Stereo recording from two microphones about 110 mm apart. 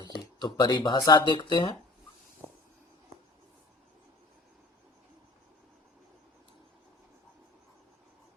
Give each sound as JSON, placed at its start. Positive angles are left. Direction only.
{"t": 0.0, "sound": "speech", "side_deg": 40}